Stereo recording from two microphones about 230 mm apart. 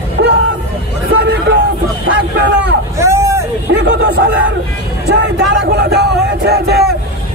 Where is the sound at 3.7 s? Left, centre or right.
Right.